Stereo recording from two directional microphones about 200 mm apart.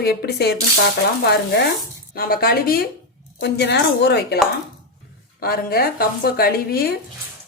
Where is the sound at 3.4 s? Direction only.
55° left (ahead or behind).